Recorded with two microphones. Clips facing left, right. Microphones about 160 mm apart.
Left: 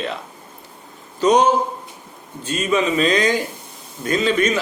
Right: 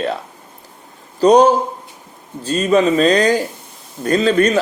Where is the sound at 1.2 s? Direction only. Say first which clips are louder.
Right 5 dB; 35° right (ahead or behind).